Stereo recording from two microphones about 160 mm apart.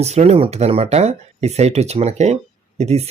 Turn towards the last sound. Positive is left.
turn(degrees=-40)  # may be behind; listen again after turning